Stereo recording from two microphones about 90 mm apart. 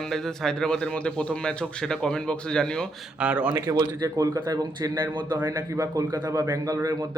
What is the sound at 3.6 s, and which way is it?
Speech, 45° right (ahead or behind).